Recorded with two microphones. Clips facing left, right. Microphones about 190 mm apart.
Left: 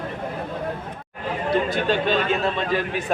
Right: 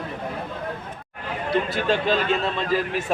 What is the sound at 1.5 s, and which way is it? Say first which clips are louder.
A man's voice: even; centre (ahead or behind).